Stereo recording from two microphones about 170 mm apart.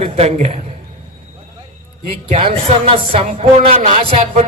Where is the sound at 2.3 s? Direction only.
35° right (ahead or behind).